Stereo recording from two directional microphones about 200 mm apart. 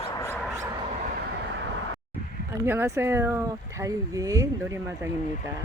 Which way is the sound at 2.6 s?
10° right (ahead or behind).